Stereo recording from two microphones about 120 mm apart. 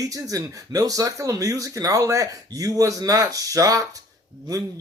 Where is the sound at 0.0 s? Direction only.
30° right (ahead or behind).